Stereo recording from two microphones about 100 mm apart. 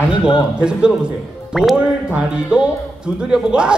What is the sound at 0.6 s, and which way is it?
A man's voice, 10° right (ahead or behind).